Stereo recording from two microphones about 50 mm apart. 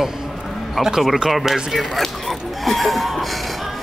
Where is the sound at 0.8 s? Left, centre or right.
Centre.